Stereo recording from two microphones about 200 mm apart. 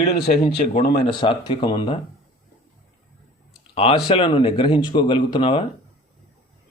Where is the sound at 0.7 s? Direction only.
50° left (ahead or behind).